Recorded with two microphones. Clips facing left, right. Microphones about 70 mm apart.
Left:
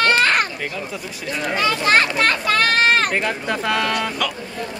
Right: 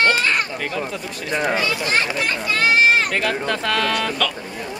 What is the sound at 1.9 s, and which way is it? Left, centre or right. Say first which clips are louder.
Speech: left 5 dB; left.